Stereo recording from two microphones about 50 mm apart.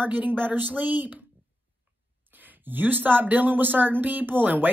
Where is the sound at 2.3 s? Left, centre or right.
Right.